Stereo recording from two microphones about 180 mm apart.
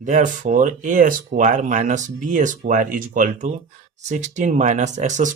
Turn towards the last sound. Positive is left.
turn(degrees=-40)  # may be behind; listen again after turning